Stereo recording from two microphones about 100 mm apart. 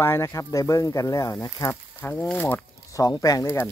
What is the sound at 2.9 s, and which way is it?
Speech, 35° left (ahead or behind).